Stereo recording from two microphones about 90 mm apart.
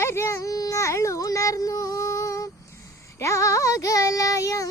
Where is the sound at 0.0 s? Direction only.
30° left (ahead or behind).